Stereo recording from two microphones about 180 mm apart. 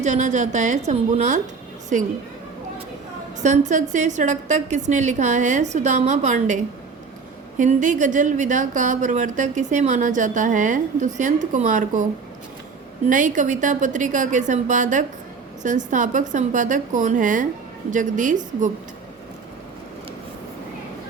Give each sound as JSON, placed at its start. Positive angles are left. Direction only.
{"t": 0.0, "sound": "speech", "side_deg": -40}
{"t": 3.4, "sound": "speech", "side_deg": -40}
{"t": 7.6, "sound": "speech", "side_deg": -45}
{"t": 13.1, "sound": "speech", "side_deg": -45}